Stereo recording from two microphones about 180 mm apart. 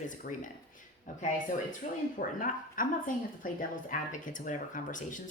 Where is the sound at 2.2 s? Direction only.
50° left (ahead or behind).